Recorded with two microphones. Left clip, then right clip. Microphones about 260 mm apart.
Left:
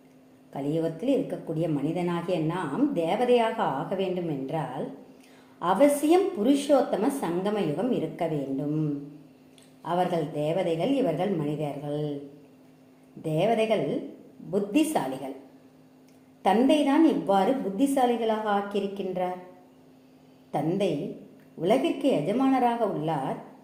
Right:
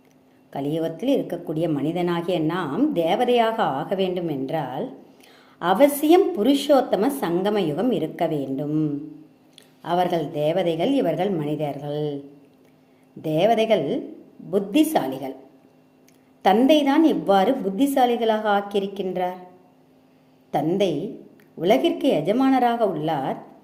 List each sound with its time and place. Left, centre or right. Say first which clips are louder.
0.5 s a woman's voice: right 3 dB; right
9.8 s a woman's voice: right 5 dB; right
13.2 s a woman's voice: right 5 dB; right
16.4 s a woman's voice: right 5 dB; right
20.5 s a woman's voice: right 5 dB; right